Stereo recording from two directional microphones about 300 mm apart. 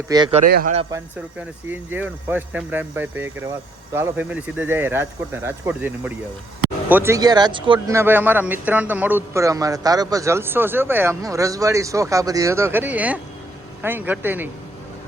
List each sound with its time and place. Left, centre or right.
0.1 s speech: centre